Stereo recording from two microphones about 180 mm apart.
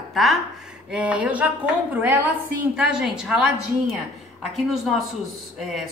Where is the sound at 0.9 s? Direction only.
5° right (ahead or behind).